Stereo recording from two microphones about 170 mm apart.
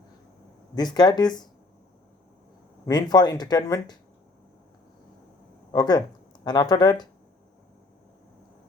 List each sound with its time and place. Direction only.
0.8 s speech: 25° left (ahead or behind)
2.8 s speech: 25° left (ahead or behind)
5.7 s speech: 25° left (ahead or behind)